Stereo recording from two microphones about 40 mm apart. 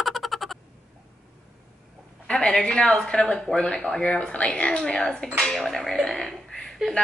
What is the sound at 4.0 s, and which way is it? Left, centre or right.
Speech, left.